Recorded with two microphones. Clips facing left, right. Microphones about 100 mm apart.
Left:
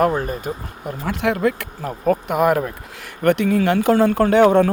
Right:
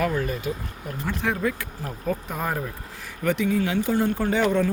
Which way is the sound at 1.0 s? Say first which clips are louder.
Left 6 dB; 70° left (ahead or behind).